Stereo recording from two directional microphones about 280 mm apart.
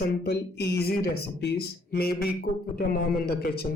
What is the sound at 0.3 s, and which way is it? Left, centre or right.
Speech, left.